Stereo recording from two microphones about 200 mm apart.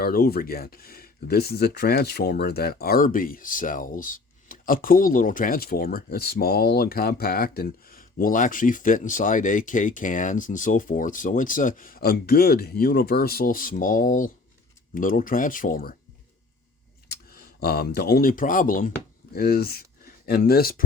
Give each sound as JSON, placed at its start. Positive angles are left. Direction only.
{"t": 0.0, "sound": "speech", "side_deg": 50}
{"t": 17.1, "sound": "speech", "side_deg": 50}